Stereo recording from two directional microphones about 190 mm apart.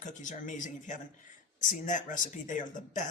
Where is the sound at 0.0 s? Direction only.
40° left (ahead or behind).